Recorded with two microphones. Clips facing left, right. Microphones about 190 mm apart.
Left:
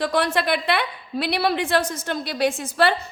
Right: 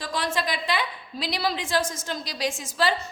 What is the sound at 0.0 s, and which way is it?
A woman's voice, 65° left (ahead or behind).